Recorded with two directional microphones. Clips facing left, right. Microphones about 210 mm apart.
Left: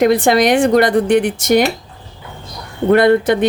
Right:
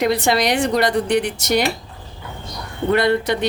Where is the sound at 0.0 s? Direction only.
50° left (ahead or behind).